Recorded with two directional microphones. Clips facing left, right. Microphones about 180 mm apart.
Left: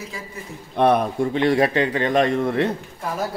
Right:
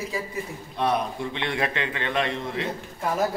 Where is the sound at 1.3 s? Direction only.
40° left (ahead or behind); by 2.7 s 55° left (ahead or behind).